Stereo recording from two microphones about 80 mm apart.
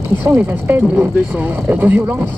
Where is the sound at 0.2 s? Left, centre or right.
Right.